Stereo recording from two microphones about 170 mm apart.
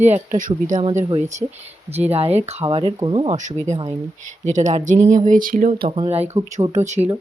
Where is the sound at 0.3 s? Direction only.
50° right (ahead or behind).